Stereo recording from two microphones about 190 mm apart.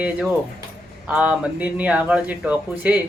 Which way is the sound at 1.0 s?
5° right (ahead or behind).